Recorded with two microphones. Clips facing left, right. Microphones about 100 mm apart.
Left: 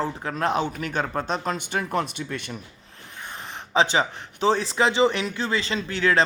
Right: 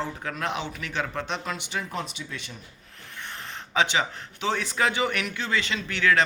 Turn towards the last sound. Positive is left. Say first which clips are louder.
# left 2 dB
turn(degrees=30)  # may be behind; listen again after turning